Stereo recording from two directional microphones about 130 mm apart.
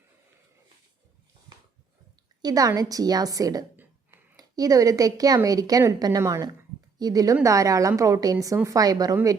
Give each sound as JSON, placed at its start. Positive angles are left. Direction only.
{"t": 2.4, "sound": "a woman's voice", "side_deg": -30}